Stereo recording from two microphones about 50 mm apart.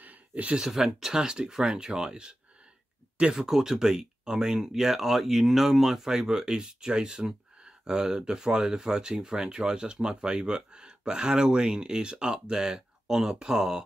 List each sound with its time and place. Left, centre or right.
0.0 s a sound: right
0.6 s speech: centre
3.4 s speech: centre